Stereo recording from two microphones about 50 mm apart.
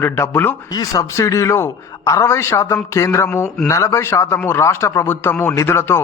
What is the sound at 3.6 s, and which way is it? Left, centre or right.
Speech, left.